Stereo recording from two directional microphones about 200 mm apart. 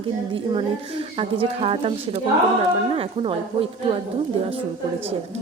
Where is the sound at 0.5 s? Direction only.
25° right (ahead or behind).